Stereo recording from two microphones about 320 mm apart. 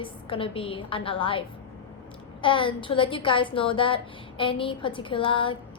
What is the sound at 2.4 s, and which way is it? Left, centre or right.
A woman's voice, centre.